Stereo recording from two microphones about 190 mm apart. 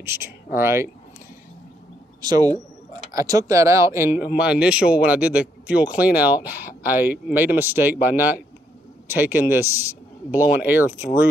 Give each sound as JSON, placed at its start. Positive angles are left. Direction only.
{"t": 0.0, "sound": "speech", "side_deg": -15}
{"t": 2.2, "sound": "a man's voice", "side_deg": -20}